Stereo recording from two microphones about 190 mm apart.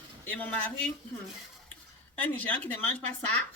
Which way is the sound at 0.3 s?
10° left (ahead or behind).